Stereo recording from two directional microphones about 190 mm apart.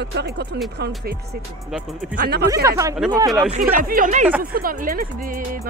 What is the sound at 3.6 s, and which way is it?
Speech, 50° right (ahead or behind).